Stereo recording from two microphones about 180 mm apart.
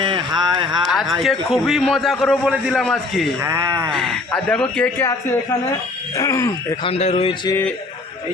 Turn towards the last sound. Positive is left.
turn(degrees=30)  # may be behind; listen again after turning